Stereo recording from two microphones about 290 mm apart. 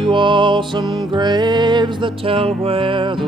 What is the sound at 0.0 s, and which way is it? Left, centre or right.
Music, centre.